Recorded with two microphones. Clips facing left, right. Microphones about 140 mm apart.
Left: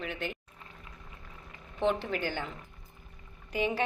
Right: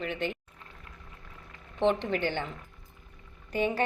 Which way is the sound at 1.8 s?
5° left (ahead or behind).